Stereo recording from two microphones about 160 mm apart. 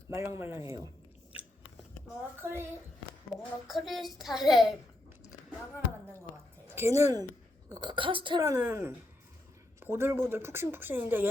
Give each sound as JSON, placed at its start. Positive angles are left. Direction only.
{"t": 0.1, "sound": "speech", "side_deg": -15}
{"t": 2.4, "sound": "speech", "side_deg": -15}
{"t": 3.3, "sound": "speech", "side_deg": 50}
{"t": 3.7, "sound": "a woman's voice", "side_deg": 0}
{"t": 6.7, "sound": "a woman's voice", "side_deg": -15}
{"t": 8.4, "sound": "speech", "side_deg": -15}